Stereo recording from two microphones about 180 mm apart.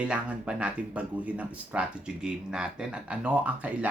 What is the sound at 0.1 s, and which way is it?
Speech, 5° right (ahead or behind).